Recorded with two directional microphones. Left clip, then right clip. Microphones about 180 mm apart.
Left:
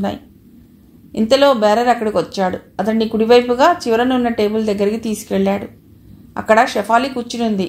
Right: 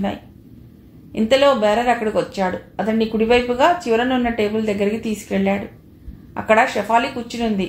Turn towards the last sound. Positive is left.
turn(degrees=40)  # may be behind; listen again after turning